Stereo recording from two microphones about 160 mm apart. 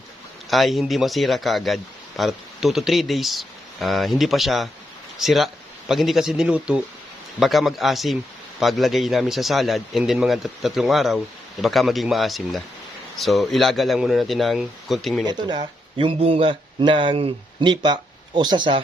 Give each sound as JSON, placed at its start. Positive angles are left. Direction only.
{"t": 0.5, "sound": "a man's voice", "side_deg": 0}
{"t": 15.3, "sound": "speech", "side_deg": -30}